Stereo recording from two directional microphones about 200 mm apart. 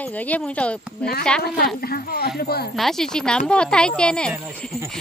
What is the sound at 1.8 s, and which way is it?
Speech, 50° left (ahead or behind).